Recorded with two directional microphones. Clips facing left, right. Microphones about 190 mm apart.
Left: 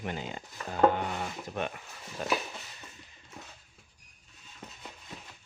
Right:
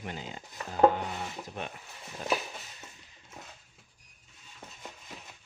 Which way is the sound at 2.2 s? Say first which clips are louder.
Even; 70° left (ahead or behind).